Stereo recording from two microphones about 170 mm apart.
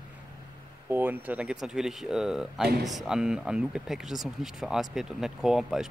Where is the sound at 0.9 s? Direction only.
10° right (ahead or behind).